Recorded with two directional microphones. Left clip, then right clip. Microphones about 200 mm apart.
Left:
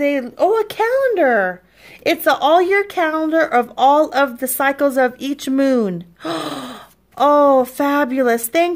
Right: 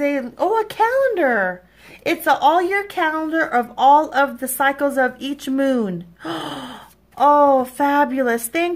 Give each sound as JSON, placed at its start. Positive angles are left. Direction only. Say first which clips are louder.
{"t": 0.0, "sound": "a woman's voice", "louder": "left 4 dB", "side_deg": 35}